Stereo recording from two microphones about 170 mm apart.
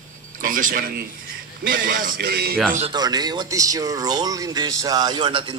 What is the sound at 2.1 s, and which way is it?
Speech, 70° right (ahead or behind).